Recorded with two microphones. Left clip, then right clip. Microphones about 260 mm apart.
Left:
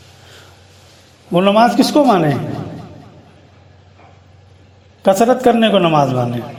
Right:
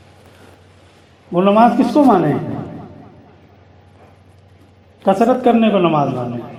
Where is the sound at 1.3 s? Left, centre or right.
Left.